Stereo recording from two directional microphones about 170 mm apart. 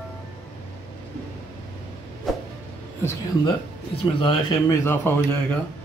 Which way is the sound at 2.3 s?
Centre (ahead or behind).